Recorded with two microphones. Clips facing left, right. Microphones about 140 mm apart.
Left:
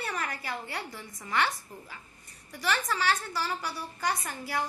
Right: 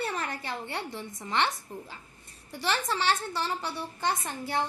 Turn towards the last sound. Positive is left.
turn(degrees=-25)  # may be behind; listen again after turning